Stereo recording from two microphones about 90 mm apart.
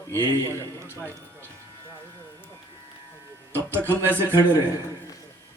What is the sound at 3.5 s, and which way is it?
Speech, 25° right (ahead or behind).